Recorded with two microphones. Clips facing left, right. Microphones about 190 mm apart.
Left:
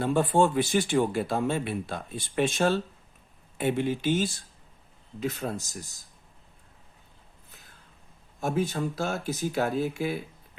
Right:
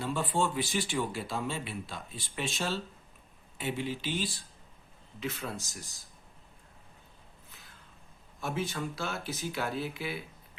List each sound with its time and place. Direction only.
0.0 s speech: 50° left (ahead or behind)
8.4 s speech: 45° left (ahead or behind)